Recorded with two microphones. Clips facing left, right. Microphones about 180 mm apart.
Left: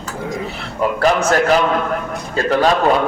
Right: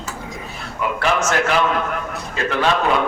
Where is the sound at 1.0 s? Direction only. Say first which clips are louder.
Left 4 dB; 35° left (ahead or behind).